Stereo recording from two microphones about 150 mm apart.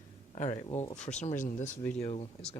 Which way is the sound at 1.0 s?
50° left (ahead or behind).